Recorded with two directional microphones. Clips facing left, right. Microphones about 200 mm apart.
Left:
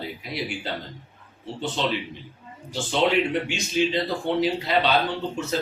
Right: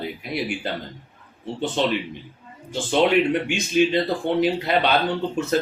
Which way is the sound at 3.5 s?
55° right (ahead or behind).